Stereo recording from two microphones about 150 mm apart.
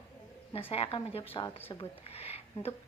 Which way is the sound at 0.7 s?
40° left (ahead or behind).